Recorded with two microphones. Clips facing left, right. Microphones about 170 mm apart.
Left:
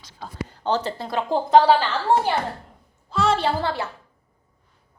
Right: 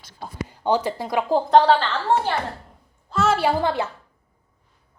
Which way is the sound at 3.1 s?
5° right (ahead or behind).